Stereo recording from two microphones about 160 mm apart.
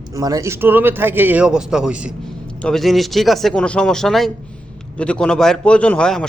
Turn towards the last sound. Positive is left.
turn(degrees=5)  # may be behind; listen again after turning